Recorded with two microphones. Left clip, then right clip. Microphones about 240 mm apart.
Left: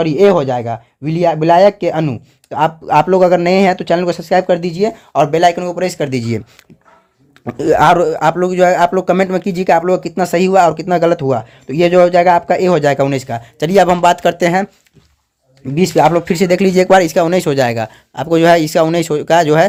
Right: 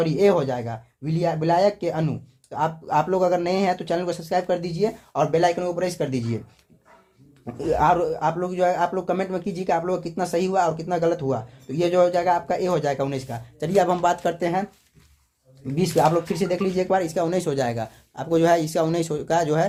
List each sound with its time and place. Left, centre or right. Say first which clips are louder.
0.0 s speech: left 9 dB; left
7.4 s speech: left 10 dB; left
15.7 s speech: left 9 dB; left